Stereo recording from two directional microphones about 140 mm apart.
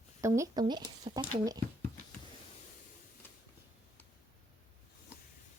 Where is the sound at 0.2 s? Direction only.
20° right (ahead or behind).